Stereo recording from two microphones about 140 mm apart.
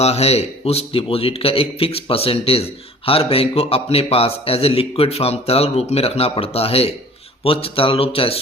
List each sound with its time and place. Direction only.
0.0 s a man's voice: 50° left (ahead or behind)